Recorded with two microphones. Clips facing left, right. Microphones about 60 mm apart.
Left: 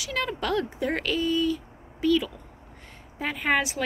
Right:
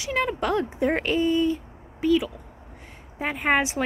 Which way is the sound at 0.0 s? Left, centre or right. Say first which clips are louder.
Right 4 dB; right.